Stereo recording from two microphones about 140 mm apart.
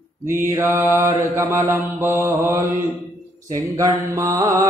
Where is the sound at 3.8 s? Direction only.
25° right (ahead or behind).